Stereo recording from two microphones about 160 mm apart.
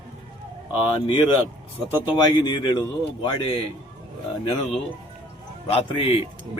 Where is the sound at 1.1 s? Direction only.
30° left (ahead or behind).